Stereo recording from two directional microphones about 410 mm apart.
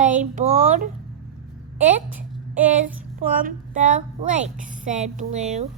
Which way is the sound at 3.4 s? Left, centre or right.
Centre.